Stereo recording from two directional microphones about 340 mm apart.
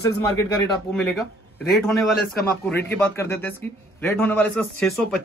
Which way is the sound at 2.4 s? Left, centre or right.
Centre.